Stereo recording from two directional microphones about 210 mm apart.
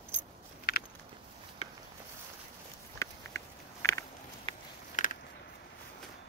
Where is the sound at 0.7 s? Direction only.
45° left (ahead or behind).